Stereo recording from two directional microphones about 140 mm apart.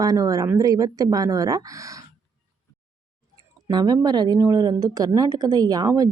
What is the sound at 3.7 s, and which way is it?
A woman's voice, 30° right (ahead or behind).